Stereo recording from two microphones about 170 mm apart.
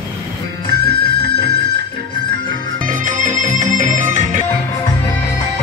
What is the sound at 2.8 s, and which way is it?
Music, 50° right (ahead or behind).